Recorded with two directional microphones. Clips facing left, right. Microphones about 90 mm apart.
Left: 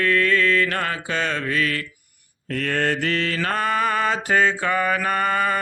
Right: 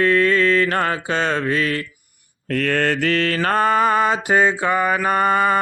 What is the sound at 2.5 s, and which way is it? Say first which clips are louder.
Mantra: right 3 dB; 90° right.